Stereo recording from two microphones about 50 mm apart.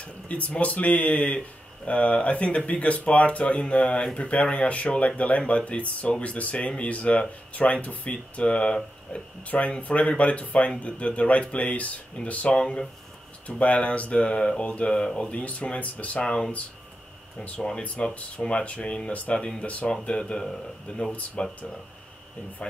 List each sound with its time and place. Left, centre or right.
0.0 s speech: left
15.0 s speech: centre
17.5 s speech: centre